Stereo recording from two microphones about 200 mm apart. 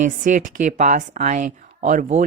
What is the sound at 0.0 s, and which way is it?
Speech, 40° right (ahead or behind).